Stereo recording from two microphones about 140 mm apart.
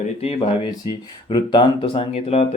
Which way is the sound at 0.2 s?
45° left (ahead or behind).